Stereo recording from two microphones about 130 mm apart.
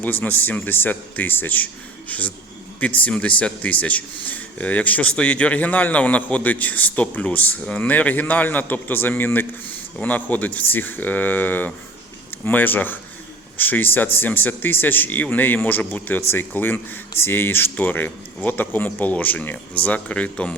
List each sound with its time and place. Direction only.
0.0 s a man's voice: 15° left (ahead or behind)